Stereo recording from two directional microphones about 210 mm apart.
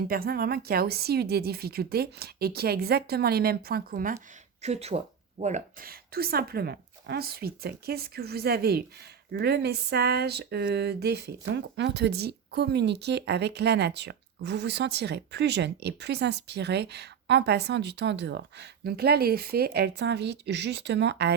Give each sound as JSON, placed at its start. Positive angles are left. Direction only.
{"t": 0.1, "sound": "speech", "side_deg": -45}
{"t": 4.6, "sound": "speech", "side_deg": -30}